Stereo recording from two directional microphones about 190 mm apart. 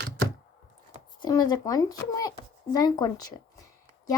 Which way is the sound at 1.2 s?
20° left (ahead or behind).